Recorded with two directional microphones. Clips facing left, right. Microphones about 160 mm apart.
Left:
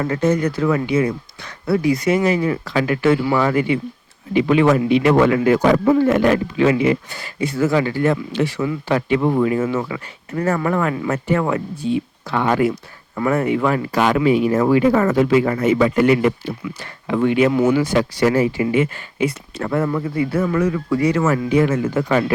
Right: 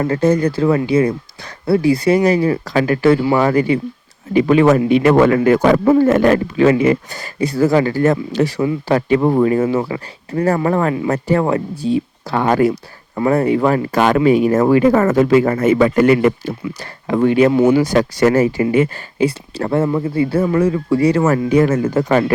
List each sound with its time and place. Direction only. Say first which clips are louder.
0.0 s speech: right 3 dB; 35° right (ahead or behind); by 16.6 s 50° right (ahead or behind)
16.6 s speech: right 3 dB; 40° right (ahead or behind)
17.5 s speech: right 4 dB; 30° right (ahead or behind)